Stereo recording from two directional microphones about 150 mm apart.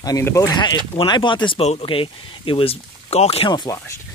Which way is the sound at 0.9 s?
30° left (ahead or behind).